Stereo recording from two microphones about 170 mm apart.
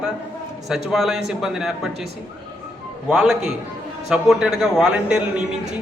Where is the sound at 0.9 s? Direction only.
Centre (ahead or behind).